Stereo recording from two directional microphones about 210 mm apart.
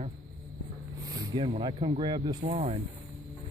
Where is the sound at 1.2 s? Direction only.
25° right (ahead or behind).